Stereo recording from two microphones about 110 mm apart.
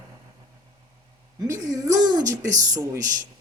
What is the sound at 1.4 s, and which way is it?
A woman's voice, 30° right (ahead or behind).